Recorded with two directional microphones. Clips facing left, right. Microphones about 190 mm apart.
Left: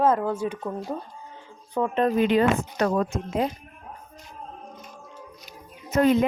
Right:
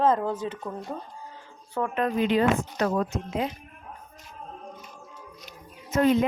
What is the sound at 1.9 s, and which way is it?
Speech, 30° left (ahead or behind).